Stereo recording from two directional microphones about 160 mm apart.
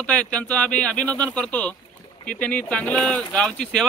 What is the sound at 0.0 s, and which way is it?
Speech, 10° left (ahead or behind).